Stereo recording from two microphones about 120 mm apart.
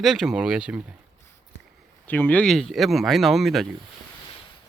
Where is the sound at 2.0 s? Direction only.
15° left (ahead or behind); by 3.6 s centre (ahead or behind).